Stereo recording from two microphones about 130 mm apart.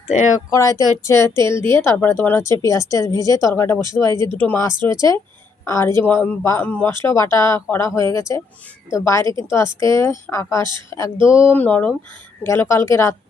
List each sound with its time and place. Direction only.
0.1 s speech: 70° left (ahead or behind)
0.5 s speech: 25° left (ahead or behind)
12.4 s speech: 20° left (ahead or behind)